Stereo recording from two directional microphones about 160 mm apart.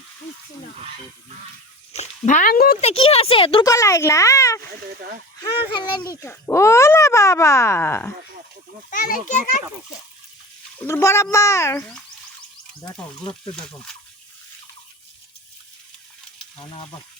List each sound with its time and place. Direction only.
1.9 s speech: 45° left (ahead or behind); by 2.7 s 65° left (ahead or behind)
2.8 s speech: 40° left (ahead or behind)
3.7 s speech: 20° left (ahead or behind)
8.9 s speech: 60° left (ahead or behind)
10.8 s speech: 15° left (ahead or behind)
16.6 s speech: 35° left (ahead or behind)